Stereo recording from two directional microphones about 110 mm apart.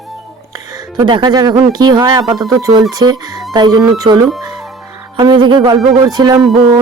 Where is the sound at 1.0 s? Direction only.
40° right (ahead or behind).